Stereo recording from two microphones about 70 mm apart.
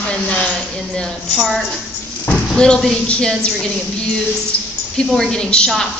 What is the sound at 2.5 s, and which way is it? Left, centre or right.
Speech, centre.